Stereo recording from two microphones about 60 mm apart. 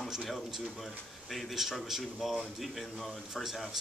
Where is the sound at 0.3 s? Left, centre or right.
Centre.